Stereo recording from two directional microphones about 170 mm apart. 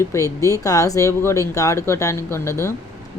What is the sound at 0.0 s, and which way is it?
Speech, 15° left (ahead or behind).